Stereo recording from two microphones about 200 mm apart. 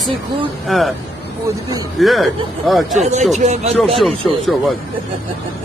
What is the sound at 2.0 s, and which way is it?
Speech, centre (ahead or behind).